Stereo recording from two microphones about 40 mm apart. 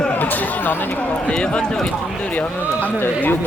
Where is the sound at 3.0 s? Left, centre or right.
Left.